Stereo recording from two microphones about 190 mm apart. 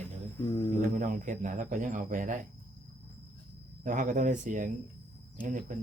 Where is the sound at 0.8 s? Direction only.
45° right (ahead or behind).